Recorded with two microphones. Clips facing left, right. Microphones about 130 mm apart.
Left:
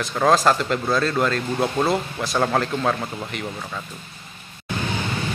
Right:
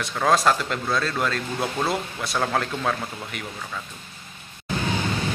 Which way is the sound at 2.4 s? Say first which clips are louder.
Left 2 dB; 10° left (ahead or behind).